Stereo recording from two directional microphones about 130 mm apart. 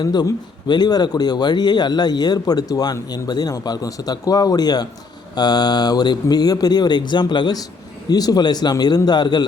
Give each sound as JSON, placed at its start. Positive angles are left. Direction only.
{"t": 0.0, "sound": "speech", "side_deg": 30}